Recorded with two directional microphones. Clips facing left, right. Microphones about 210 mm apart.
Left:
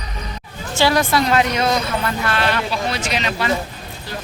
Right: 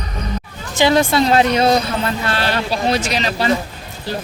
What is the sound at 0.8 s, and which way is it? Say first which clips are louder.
A woman's voice: right 3 dB; 25° right (ahead or behind).